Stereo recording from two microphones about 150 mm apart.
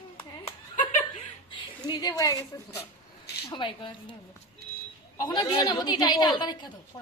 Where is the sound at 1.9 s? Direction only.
25° left (ahead or behind).